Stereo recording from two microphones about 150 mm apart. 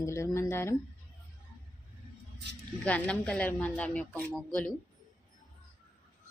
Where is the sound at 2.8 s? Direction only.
10° left (ahead or behind).